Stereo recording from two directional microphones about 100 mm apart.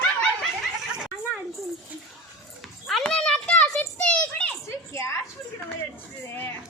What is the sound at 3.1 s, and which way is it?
Children playing, 5° left (ahead or behind).